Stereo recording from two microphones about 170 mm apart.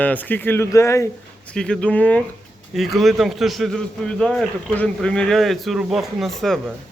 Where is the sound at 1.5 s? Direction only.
5° left (ahead or behind).